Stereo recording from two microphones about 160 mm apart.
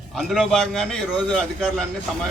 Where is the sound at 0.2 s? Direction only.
Centre (ahead or behind).